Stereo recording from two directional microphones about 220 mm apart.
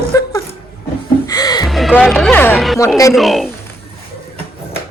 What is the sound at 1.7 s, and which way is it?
A man's voice, centre (ahead or behind).